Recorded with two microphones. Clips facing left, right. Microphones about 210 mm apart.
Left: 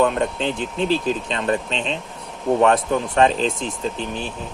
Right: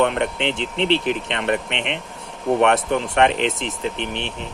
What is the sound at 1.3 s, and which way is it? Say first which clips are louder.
Speech: even; 75° right (ahead or behind).